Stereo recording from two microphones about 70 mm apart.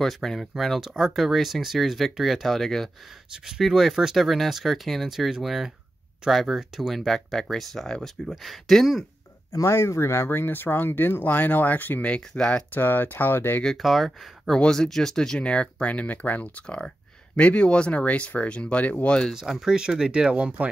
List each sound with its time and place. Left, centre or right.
0.0 s speech: centre
9.5 s speech: left; by 12.6 s centre
12.7 s speech: left
13.7 s speech: centre; by 19.1 s left
19.3 s speech: centre